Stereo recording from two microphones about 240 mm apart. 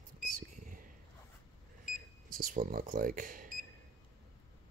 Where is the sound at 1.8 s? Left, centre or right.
Right.